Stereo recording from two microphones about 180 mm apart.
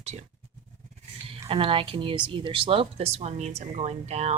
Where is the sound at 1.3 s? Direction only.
30° right (ahead or behind).